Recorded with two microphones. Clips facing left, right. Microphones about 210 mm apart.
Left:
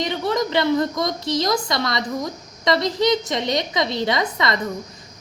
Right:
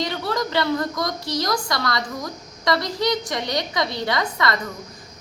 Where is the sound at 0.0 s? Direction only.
20° left (ahead or behind).